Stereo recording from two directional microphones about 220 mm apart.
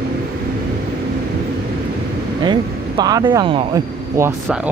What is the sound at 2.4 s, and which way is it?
Speech, 20° right (ahead or behind).